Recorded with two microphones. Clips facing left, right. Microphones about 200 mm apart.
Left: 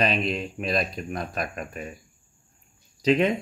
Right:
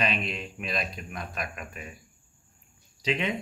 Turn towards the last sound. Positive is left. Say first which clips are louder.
# left 8 dB
turn(degrees=45)  # may be behind; listen again after turning